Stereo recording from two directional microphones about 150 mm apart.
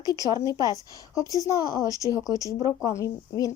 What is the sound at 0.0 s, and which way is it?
Speech, 25° left (ahead or behind).